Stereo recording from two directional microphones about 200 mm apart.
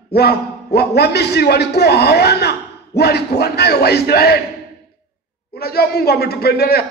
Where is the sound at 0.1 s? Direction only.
50° left (ahead or behind).